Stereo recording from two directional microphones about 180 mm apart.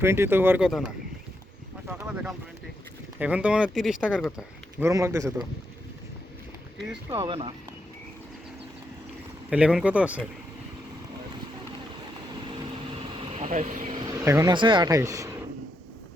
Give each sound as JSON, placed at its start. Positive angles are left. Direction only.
{"t": 0.0, "sound": "speech", "side_deg": -15}
{"t": 1.9, "sound": "speech", "side_deg": -10}
{"t": 4.4, "sound": "speech", "side_deg": -15}
{"t": 7.1, "sound": "speech", "side_deg": -20}
{"t": 9.5, "sound": "speech", "side_deg": -5}
{"t": 12.5, "sound": "vehicle", "side_deg": -25}
{"t": 13.1, "sound": "vehicle", "side_deg": -40}
{"t": 13.9, "sound": "vehicle", "side_deg": -20}
{"t": 14.5, "sound": "speech", "side_deg": -25}